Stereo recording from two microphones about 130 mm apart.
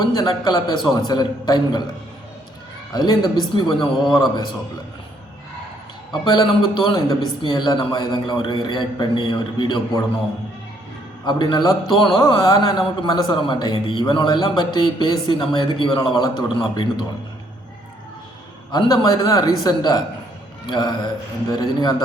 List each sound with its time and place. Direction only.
0.0 s a man's voice: 30° left (ahead or behind)
2.9 s a man's voice: 30° left (ahead or behind)
4.0 s a man's voice: centre (ahead or behind)
6.2 s a man's voice: 35° left (ahead or behind)
11.3 s a man's voice: 35° left (ahead or behind)
18.7 s a man's voice: 30° left (ahead or behind)